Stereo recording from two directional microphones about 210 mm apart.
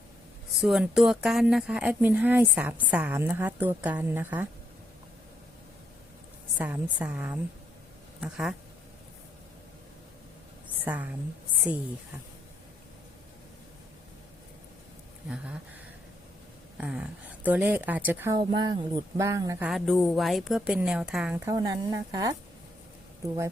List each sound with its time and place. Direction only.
0.5 s speech: centre (ahead or behind)
6.6 s a woman's voice: 5° right (ahead or behind)
10.8 s speech: 5° right (ahead or behind)
16.7 s speech: 5° right (ahead or behind)
18.3 s a sound: 20° right (ahead or behind)
19.6 s a woman's voice: centre (ahead or behind)